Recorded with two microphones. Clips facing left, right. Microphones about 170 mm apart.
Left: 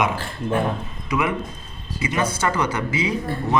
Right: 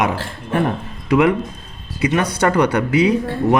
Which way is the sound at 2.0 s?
65° right (ahead or behind).